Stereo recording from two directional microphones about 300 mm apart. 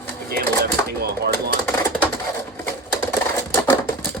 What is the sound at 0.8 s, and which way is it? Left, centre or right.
Speech, right.